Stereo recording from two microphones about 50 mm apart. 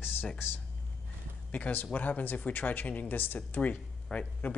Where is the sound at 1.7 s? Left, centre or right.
Left.